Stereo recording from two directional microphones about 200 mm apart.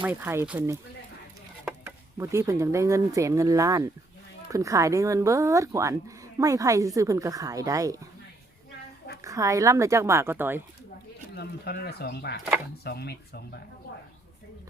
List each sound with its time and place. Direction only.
0.0 s speech: 10° right (ahead or behind)
2.1 s speech: 15° right (ahead or behind)
9.2 s speech: 15° right (ahead or behind)
11.3 s speech: 55° left (ahead or behind)